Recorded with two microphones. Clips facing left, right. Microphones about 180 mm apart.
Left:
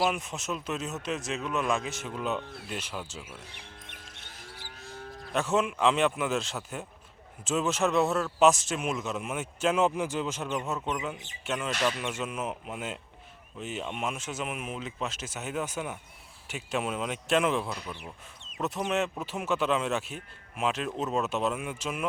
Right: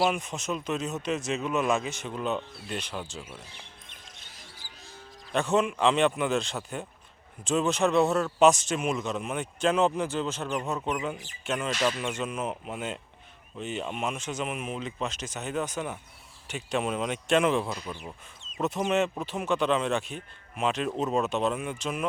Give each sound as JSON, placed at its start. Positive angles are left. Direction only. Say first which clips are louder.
{"t": 0.1, "sound": "speech", "louder": "right 2 dB", "side_deg": 0}
{"t": 4.2, "sound": "music", "louder": "left 4 dB", "side_deg": 65}
{"t": 5.3, "sound": "speech", "louder": "right 2 dB", "side_deg": 5}